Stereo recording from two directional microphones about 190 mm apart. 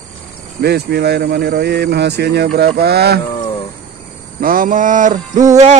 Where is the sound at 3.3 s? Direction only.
25° left (ahead or behind).